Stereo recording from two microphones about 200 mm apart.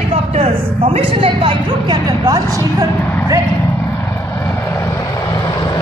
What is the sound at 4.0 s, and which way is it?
Vehicle, 10° left (ahead or behind).